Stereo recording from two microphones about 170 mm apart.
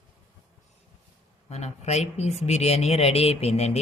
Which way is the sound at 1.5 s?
40° left (ahead or behind).